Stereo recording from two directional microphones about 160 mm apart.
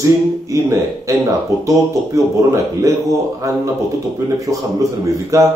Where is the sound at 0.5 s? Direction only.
20° right (ahead or behind).